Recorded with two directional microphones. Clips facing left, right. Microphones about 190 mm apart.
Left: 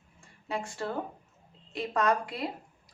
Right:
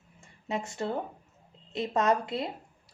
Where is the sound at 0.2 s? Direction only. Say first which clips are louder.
Right 1 dB; 20° right (ahead or behind).